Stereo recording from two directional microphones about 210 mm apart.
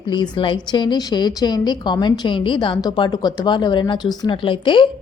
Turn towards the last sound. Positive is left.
turn(degrees=25)  # may be behind; listen again after turning